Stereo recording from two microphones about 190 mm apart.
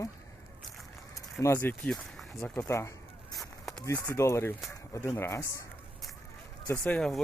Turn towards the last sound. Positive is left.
turn(degrees=5)  # may be behind; listen again after turning